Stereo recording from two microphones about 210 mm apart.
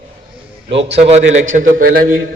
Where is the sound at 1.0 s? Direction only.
30° right (ahead or behind).